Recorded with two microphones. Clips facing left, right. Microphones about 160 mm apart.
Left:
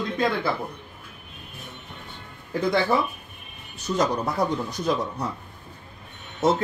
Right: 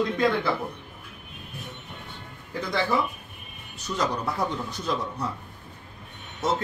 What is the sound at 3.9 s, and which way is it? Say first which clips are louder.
Speech: left 5 dB; 25° left (ahead or behind).